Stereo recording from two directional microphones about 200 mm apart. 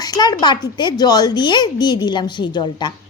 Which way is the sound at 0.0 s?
20° left (ahead or behind).